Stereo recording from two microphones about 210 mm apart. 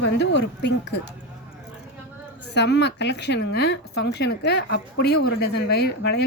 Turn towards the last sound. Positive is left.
turn(degrees=50)  # may be behind; listen again after turning